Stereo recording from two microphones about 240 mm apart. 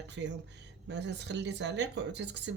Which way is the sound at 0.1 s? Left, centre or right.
Right.